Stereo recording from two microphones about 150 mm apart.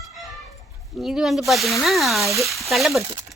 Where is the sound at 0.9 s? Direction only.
Centre (ahead or behind).